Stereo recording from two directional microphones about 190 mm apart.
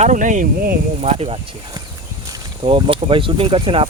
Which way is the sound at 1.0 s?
30° right (ahead or behind).